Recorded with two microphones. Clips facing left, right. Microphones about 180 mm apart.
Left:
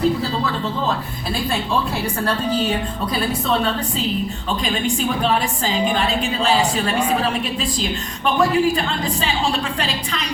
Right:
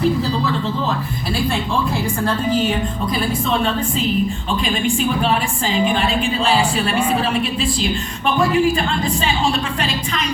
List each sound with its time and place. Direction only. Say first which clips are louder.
5.2 s a woman's voice: even; 35° left (ahead or behind)
8.4 s a woman's voice: right 1 dB; 40° left (ahead or behind)